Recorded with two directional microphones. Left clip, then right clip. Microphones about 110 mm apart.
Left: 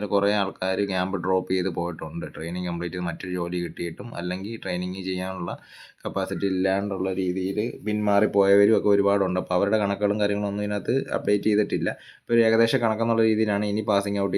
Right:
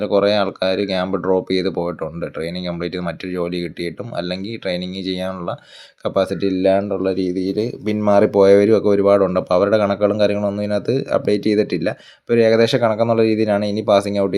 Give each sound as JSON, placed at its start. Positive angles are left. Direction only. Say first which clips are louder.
{"t": 0.0, "sound": "speech", "louder": "right 7 dB", "side_deg": -30}